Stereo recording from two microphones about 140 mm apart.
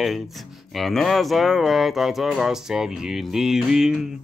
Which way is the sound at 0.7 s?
Centre (ahead or behind).